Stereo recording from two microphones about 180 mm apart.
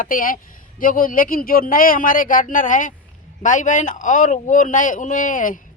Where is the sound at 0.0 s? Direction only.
50° left (ahead or behind).